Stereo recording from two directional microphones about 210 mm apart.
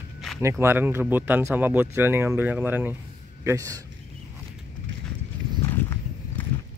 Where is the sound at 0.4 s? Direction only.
10° right (ahead or behind).